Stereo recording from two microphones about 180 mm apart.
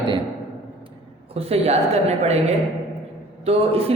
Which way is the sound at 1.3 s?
35° right (ahead or behind).